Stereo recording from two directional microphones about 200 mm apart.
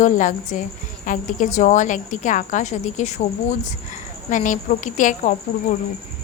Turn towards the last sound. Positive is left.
turn(degrees=40)  # may be behind; listen again after turning